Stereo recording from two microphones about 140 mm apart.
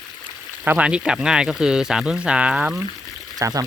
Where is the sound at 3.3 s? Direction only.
25° right (ahead or behind).